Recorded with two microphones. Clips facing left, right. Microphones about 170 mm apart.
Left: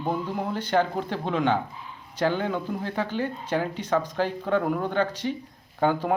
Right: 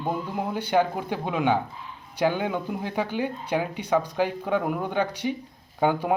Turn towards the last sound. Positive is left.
turn(degrees=-10)  # may be behind; listen again after turning